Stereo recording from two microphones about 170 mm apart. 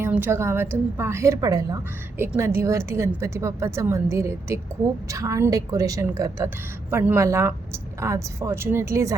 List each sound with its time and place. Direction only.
0.0 s a woman's voice: 15° right (ahead or behind)